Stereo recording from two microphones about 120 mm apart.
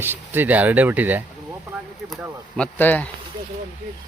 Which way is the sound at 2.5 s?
15° left (ahead or behind).